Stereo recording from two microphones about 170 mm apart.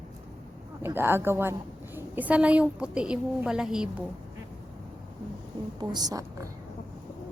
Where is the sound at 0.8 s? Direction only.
15° right (ahead or behind).